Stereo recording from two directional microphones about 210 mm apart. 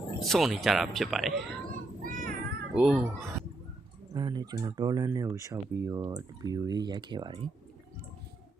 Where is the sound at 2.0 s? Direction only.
40° right (ahead or behind).